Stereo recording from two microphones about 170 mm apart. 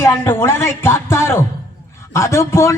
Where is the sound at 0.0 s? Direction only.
15° left (ahead or behind).